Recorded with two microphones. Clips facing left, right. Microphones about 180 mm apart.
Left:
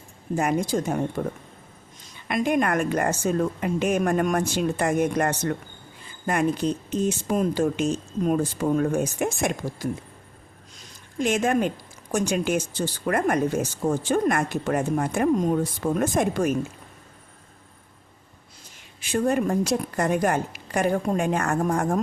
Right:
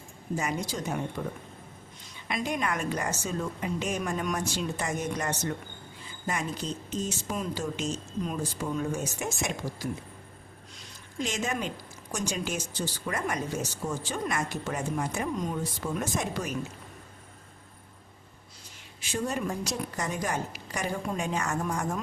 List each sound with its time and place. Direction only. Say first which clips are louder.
0.3 s speech: left 9 dB; 50° left (ahead or behind)
2.2 s speech: left 8 dB; 55° left (ahead or behind)
11.2 s speech: left 9 dB; 55° left (ahead or behind)
19.1 s speech: left 9 dB; 55° left (ahead or behind)